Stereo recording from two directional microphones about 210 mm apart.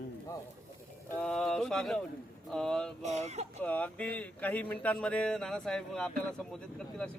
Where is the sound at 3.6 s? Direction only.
5° left (ahead or behind).